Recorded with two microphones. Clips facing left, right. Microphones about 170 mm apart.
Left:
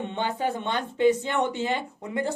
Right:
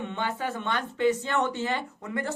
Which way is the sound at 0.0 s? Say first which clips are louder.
Left 3 dB; 20° left (ahead or behind).